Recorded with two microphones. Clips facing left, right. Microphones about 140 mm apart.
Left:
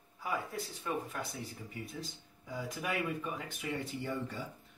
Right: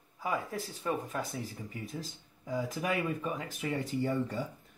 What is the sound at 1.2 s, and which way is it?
Speech, centre (ahead or behind).